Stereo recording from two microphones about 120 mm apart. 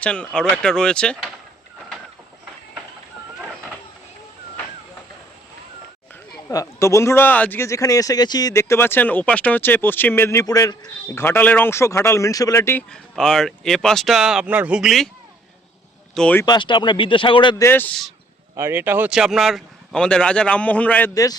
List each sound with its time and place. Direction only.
0.0 s a man's voice: 10° left (ahead or behind)
6.5 s speech: 25° left (ahead or behind)
11.2 s speech: 15° left (ahead or behind)
12.9 s speech: 5° left (ahead or behind)
16.1 s a man's voice: 10° left (ahead or behind)
16.5 s speech: 40° left (ahead or behind)
17.6 s a man's voice: 15° left (ahead or behind)
18.5 s speech: 20° right (ahead or behind)
19.1 s a man's voice: 5° right (ahead or behind); by 21.1 s 15° left (ahead or behind)